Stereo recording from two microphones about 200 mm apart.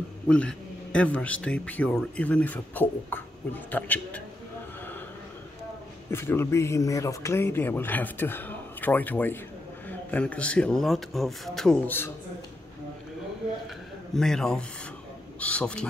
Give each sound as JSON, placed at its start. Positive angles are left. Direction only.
{"t": 0.3, "sound": "speech", "side_deg": 5}
{"t": 6.0, "sound": "speech", "side_deg": 10}
{"t": 14.1, "sound": "speech", "side_deg": 0}